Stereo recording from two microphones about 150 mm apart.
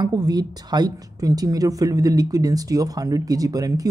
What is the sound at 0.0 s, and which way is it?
Speech, 25° right (ahead or behind).